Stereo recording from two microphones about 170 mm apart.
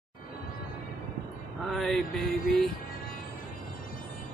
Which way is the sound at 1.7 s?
Centre (ahead or behind).